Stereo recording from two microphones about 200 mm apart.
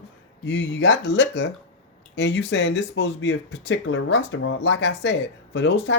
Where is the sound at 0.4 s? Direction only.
65° left (ahead or behind).